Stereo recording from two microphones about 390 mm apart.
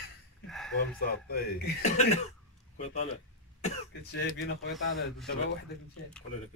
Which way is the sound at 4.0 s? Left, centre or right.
Left.